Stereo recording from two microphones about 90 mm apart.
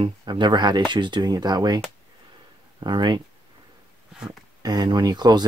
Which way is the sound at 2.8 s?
55° right (ahead or behind).